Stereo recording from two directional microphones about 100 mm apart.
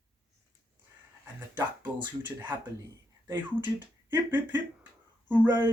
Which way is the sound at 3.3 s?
20° right (ahead or behind).